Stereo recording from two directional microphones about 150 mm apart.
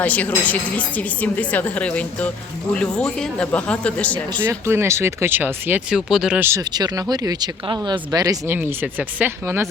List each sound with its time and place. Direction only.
0.0 s a woman's voice: 10° left (ahead or behind)
4.4 s speech: 15° right (ahead or behind)
6.5 s speech: 25° right (ahead or behind)
8.5 s speech: 10° right (ahead or behind)